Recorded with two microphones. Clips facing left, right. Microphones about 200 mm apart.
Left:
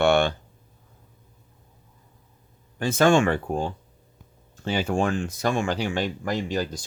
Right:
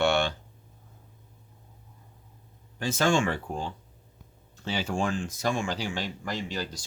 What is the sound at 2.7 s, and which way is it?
Speech, 55° left (ahead or behind).